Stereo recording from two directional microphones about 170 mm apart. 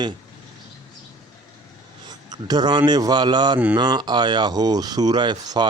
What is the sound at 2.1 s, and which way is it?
Speech, 25° right (ahead or behind).